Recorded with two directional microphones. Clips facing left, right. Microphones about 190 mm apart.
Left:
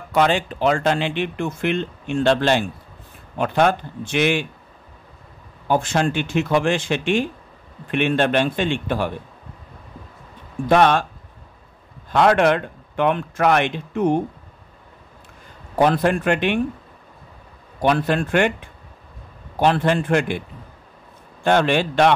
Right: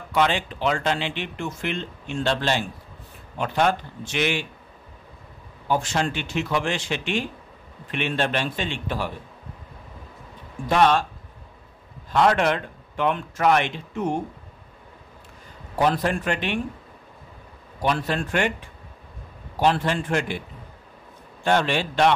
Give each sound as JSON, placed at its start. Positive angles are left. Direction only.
{"t": 0.1, "sound": "speech", "side_deg": 45}
{"t": 5.7, "sound": "speech", "side_deg": 50}
{"t": 10.7, "sound": "a man's voice", "side_deg": 55}
{"t": 12.1, "sound": "a man's voice", "side_deg": 60}
{"t": 15.7, "sound": "a man's voice", "side_deg": 60}
{"t": 17.8, "sound": "a man's voice", "side_deg": 60}
{"t": 19.6, "sound": "a man's voice", "side_deg": 55}
{"t": 21.5, "sound": "a man's voice", "side_deg": 55}